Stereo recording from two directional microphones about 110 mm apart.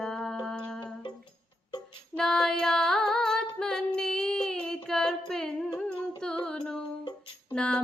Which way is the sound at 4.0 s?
5° left (ahead or behind).